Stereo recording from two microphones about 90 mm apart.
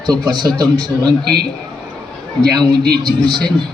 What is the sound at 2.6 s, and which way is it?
Speech, 55° right (ahead or behind).